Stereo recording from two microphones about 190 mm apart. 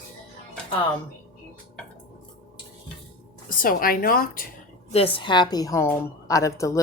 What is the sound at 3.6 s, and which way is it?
Speech, 50° left (ahead or behind).